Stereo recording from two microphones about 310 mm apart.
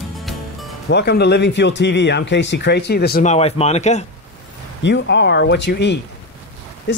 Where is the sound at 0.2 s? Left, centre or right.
Centre.